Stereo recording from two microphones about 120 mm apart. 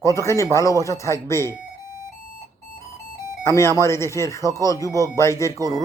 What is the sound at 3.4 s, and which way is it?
Speech, 25° left (ahead or behind).